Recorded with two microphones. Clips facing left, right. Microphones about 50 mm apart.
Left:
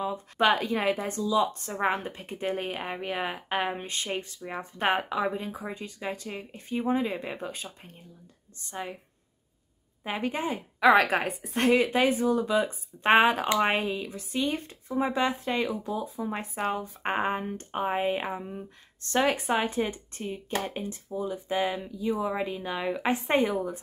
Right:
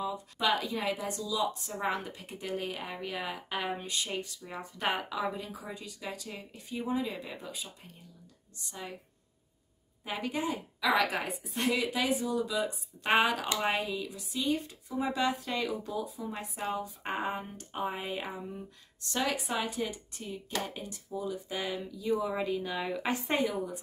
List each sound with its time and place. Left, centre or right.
0.0 s speech: left
1.5 s speech: left
10.0 s a woman's voice: left
16.3 s a woman's voice: left